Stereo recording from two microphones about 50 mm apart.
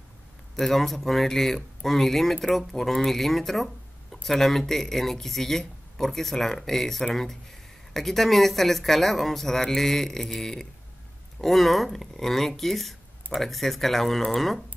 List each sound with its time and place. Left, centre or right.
0.6 s speech: centre